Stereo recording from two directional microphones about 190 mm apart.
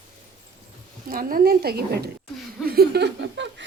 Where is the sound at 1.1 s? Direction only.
50° right (ahead or behind).